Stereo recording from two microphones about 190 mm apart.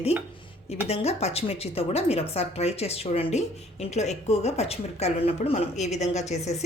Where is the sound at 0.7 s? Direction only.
35° left (ahead or behind).